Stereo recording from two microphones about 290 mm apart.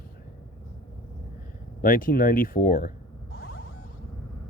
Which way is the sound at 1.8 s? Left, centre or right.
Left.